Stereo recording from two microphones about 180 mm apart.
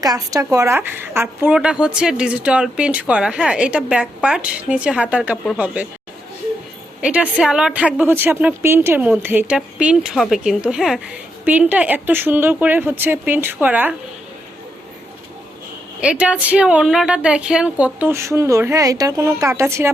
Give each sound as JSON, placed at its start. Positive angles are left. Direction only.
{"t": 0.0, "sound": "a woman's voice", "side_deg": -20}
{"t": 7.0, "sound": "a woman's voice", "side_deg": -5}
{"t": 16.0, "sound": "a woman's voice", "side_deg": -5}